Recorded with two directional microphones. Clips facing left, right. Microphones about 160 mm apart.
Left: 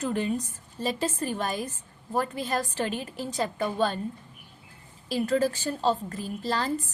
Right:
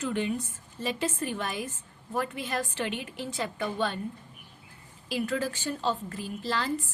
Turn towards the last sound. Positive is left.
turn(degrees=40)  # may be behind; listen again after turning